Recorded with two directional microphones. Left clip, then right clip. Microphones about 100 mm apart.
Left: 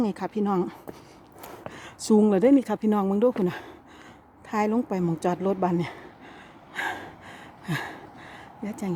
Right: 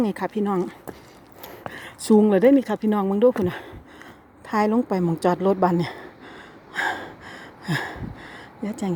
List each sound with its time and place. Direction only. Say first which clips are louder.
0.0 s speech: right 3 dB; 5° left (ahead or behind)
0.5 s speech: right 1 dB; 35° left (ahead or behind)
1.7 s a sound: right 4 dB; 10° left (ahead or behind)
2.3 s speech: right 3 dB; 15° left (ahead or behind)
3.4 s speech: right 2 dB; 10° left (ahead or behind)
4.4 s a woman's voice: right 4 dB; 10° right (ahead or behind)
4.9 s a sound: right 5 dB; 15° right (ahead or behind)